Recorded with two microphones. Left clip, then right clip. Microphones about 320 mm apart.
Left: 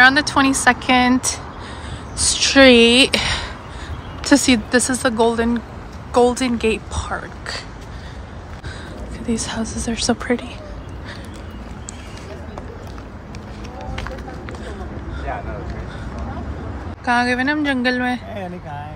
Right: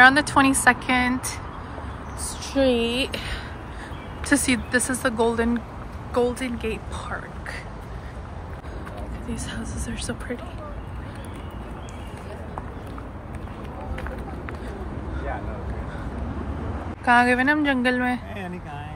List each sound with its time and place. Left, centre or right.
0.0 s a woman's voice: centre
2.1 s a woman's voice: left; by 7.6 s centre
9.3 s a woman's voice: centre
17.0 s a woman's voice: centre